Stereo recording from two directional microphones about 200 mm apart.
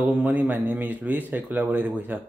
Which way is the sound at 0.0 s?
10° right (ahead or behind).